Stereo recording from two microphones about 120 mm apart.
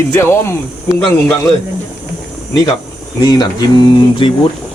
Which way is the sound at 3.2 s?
35° left (ahead or behind).